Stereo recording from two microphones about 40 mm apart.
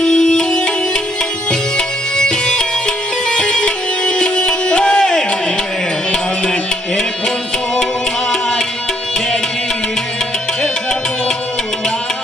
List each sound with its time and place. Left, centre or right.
0.0 s music: centre
2.1 s music: centre
8.3 s music: centre